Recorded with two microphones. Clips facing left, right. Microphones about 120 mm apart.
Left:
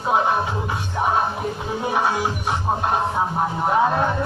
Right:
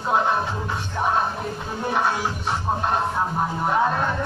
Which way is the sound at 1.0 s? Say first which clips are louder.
Left 2 dB; 10° left (ahead or behind).